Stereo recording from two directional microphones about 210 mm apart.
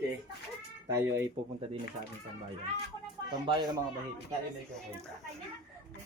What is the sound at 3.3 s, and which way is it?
Speech, 20° right (ahead or behind).